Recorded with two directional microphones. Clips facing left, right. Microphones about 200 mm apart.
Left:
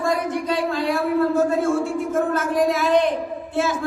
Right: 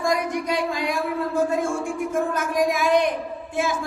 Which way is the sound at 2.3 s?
15° right (ahead or behind).